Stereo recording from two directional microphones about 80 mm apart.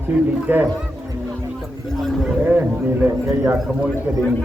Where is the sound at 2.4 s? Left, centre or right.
Right.